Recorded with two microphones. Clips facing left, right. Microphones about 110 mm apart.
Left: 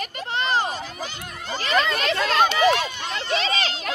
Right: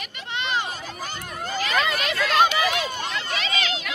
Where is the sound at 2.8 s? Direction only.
45° right (ahead or behind).